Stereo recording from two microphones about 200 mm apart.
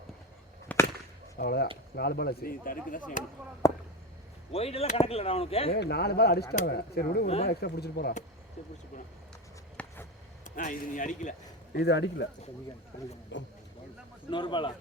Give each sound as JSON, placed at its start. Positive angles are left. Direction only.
{"t": 0.7, "sound": "a sound", "side_deg": 5}
{"t": 1.4, "sound": "speech", "side_deg": 55}
{"t": 3.6, "sound": "speech", "side_deg": 15}
{"t": 4.5, "sound": "speech", "side_deg": 30}
{"t": 5.7, "sound": "speech", "side_deg": 55}
{"t": 9.7, "sound": "a sound", "side_deg": 10}
{"t": 10.4, "sound": "speech", "side_deg": 40}
{"t": 11.8, "sound": "speech", "side_deg": 60}
{"t": 13.3, "sound": "speech", "side_deg": 65}
{"t": 14.3, "sound": "speech", "side_deg": 25}